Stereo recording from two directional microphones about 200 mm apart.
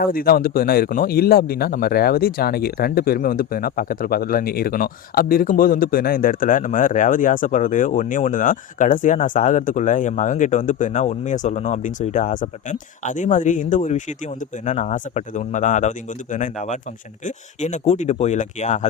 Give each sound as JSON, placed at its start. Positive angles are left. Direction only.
{"t": 0.0, "sound": "speech", "side_deg": 45}